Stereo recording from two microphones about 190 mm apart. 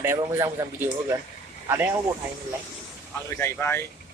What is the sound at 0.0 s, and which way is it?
Speech, 15° right (ahead or behind).